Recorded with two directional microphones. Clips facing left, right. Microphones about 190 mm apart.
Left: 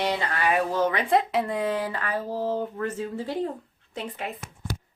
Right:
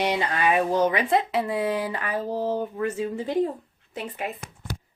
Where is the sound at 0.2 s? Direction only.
20° right (ahead or behind).